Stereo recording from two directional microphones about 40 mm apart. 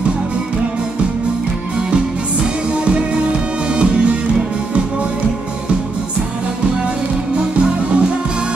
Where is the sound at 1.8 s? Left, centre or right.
Right.